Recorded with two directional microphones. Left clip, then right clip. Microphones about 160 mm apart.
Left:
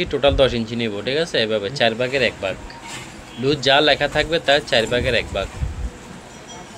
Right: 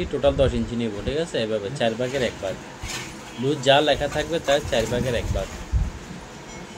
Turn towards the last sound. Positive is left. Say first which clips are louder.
# left 6 dB
turn(degrees=20)  # may be behind; listen again after turning